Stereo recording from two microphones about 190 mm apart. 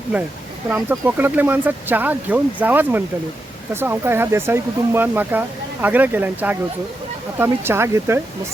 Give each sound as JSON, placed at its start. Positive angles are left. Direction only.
{"t": 0.7, "sound": "speech", "side_deg": -10}